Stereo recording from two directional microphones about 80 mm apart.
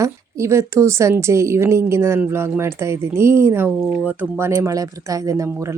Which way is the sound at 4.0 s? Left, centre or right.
Right.